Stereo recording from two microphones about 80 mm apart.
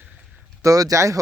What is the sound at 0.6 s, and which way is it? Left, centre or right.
Speech, right.